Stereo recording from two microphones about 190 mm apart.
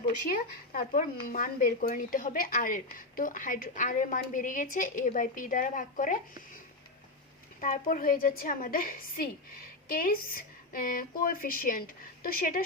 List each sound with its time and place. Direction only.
0.3 s speech: 45° left (ahead or behind)
7.6 s speech: 45° left (ahead or behind)